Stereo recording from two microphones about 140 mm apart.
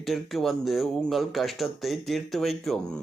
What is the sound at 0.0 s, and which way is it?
Speech, centre (ahead or behind).